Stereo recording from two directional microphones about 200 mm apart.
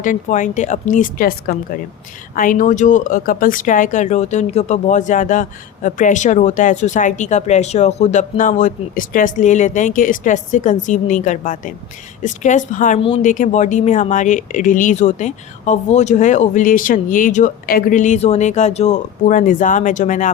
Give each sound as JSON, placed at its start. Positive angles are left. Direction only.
{"t": 0.0, "sound": "speech", "side_deg": 40}